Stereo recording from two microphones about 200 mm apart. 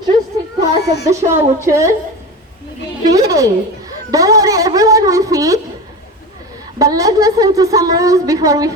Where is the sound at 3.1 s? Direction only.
15° right (ahead or behind).